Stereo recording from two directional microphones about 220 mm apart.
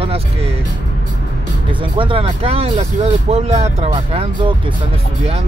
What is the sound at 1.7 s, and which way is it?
Speech, 20° right (ahead or behind).